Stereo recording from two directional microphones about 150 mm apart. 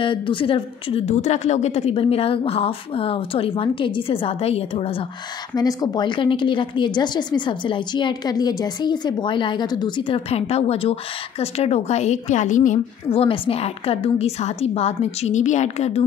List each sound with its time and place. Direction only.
0.0 s a woman's voice: 35° left (ahead or behind)
5.5 s a woman's voice: 25° left (ahead or behind); by 12.8 s 55° left (ahead or behind)
13.1 s a woman's voice: 40° left (ahead or behind)